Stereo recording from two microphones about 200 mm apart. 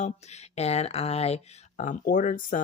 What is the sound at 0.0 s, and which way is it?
Speech, 35° left (ahead or behind).